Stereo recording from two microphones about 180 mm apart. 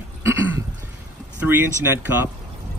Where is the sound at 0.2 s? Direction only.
15° right (ahead or behind).